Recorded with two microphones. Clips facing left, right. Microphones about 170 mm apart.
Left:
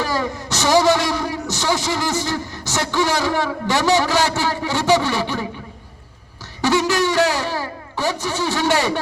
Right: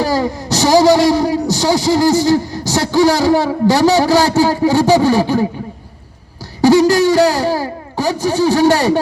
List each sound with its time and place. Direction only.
0.0 s a man's voice: 35° right (ahead or behind)
6.6 s a sound: 40° right (ahead or behind)
7.1 s a man's voice: 40° right (ahead or behind)